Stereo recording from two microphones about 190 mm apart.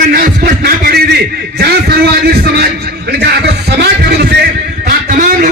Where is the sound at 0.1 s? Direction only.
50° right (ahead or behind).